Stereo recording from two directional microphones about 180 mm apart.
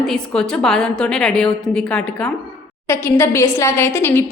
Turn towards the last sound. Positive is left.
turn(degrees=15)  # may be behind; listen again after turning